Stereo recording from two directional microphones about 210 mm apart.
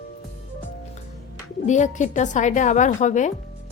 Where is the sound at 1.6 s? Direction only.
35° left (ahead or behind).